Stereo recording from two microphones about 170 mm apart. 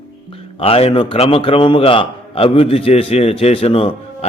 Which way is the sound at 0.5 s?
35° left (ahead or behind).